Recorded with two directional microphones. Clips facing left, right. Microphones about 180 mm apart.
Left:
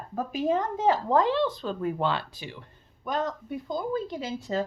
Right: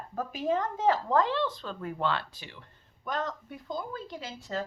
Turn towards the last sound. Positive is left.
turn(degrees=20)  # may be behind; listen again after turning